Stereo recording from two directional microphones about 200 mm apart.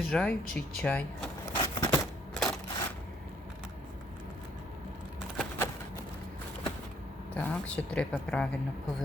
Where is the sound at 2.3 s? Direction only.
5° left (ahead or behind).